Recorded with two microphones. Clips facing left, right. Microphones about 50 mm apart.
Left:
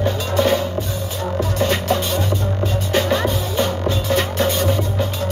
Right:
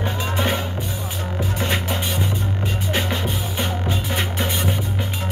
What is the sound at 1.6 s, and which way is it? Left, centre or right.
Music, centre.